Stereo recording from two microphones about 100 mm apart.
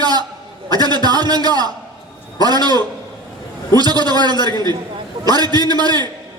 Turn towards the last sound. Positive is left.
turn(degrees=-45)  # may be behind; listen again after turning